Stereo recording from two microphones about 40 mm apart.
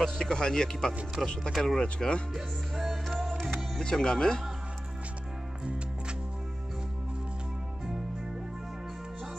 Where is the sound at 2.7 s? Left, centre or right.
Centre.